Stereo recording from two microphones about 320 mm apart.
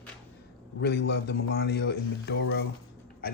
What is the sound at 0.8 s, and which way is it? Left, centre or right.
Speech, left.